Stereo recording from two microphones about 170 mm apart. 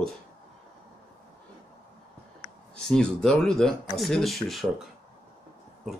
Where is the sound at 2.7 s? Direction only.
5° left (ahead or behind).